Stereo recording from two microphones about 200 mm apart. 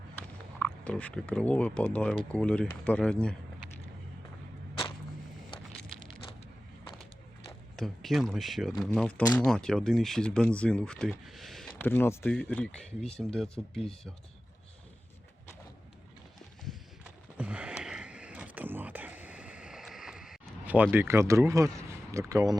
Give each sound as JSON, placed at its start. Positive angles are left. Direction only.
{"t": 0.2, "sound": "speech", "side_deg": 5}
{"t": 7.8, "sound": "speech", "side_deg": 0}
{"t": 16.6, "sound": "a sound", "side_deg": -5}
{"t": 22.3, "sound": "speech", "side_deg": -15}